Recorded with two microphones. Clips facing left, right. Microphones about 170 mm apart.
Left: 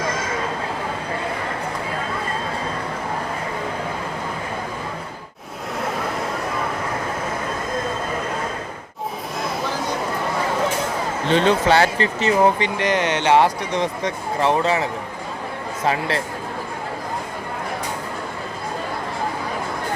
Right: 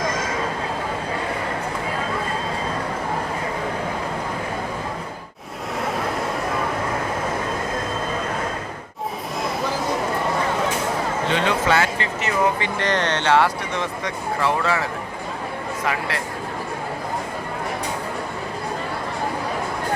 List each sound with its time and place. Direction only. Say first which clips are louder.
5.8 s vehicle: even; centre (ahead or behind)
9.4 s a sound: right 1 dB; centre (ahead or behind)
11.3 s speech: left 5 dB; 30° left (ahead or behind)
12.8 s speech: left 2 dB; 10° left (ahead or behind)
15.9 s speech: left 5 dB; 25° left (ahead or behind)